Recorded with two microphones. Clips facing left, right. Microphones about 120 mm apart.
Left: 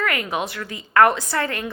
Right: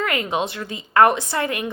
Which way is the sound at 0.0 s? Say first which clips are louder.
Right 2 dB; 20° right (ahead or behind).